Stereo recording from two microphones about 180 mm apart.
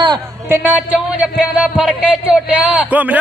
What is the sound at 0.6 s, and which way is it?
Speech, 5° right (ahead or behind).